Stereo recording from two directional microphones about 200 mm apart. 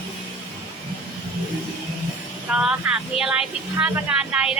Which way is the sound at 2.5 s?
5° right (ahead or behind).